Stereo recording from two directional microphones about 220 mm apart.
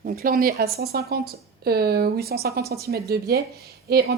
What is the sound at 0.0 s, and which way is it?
Speech, 40° right (ahead or behind).